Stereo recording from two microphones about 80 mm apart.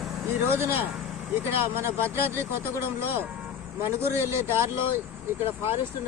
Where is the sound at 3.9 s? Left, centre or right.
Right.